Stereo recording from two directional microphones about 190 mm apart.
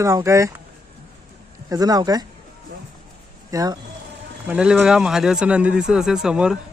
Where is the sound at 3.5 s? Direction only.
20° right (ahead or behind).